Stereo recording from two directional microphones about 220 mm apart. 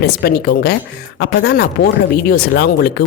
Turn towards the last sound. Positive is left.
turn(degrees=45)  # may be behind; listen again after turning